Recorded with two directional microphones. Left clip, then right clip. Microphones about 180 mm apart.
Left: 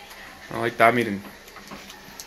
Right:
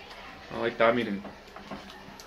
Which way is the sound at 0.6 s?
50° left (ahead or behind).